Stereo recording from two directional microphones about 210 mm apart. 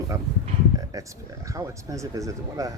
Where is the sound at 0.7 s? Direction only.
15° right (ahead or behind).